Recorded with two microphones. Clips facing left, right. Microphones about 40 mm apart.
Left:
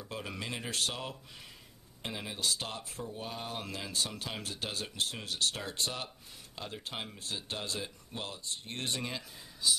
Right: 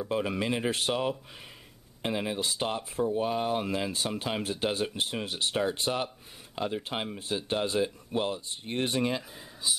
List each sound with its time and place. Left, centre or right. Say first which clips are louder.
0.0 s speech: right 11 dB; right